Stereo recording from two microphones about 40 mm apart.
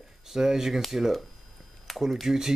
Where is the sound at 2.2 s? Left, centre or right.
Centre.